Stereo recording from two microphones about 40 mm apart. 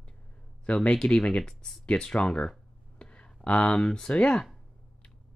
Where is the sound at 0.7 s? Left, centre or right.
Left.